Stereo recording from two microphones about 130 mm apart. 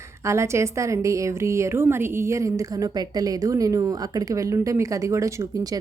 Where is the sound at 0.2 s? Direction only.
20° right (ahead or behind).